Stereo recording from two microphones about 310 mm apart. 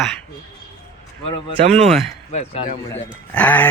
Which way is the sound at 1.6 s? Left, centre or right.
Right.